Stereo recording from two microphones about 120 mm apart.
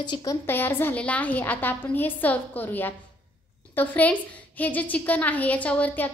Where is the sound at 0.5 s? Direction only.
15° left (ahead or behind).